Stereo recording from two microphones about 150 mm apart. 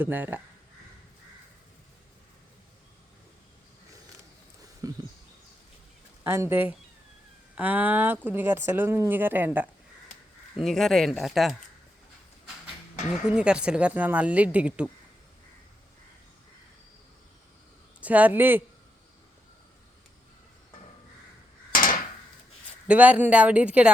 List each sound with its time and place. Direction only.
0.0 s speech: 15° right (ahead or behind)
4.8 s a sound: 20° right (ahead or behind)
6.2 s speech: 15° right (ahead or behind)
10.6 s speech: centre (ahead or behind)
13.2 s speech: 5° right (ahead or behind)
18.0 s speech: 10° right (ahead or behind)
21.7 s a sound: 65° left (ahead or behind)
22.9 s speech: 10° right (ahead or behind)